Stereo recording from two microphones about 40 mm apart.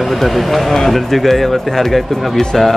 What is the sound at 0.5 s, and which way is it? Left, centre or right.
Speech, centre.